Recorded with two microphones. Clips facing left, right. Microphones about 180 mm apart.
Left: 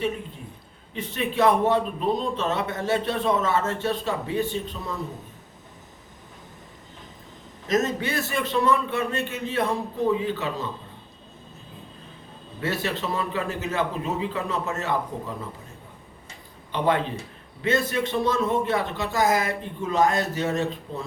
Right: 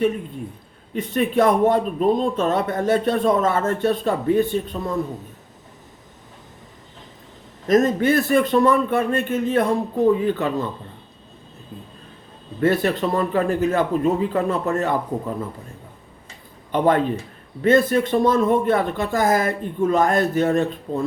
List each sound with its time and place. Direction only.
0.9 s speech: 50° right (ahead or behind)
7.7 s speech: 50° right (ahead or behind)
12.5 s speech: 50° right (ahead or behind)
16.7 s speech: 50° right (ahead or behind)